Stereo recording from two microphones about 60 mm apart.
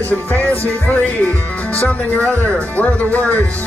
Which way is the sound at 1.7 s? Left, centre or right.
Left.